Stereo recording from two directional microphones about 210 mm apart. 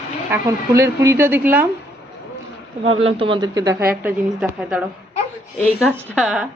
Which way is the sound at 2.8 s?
25° right (ahead or behind).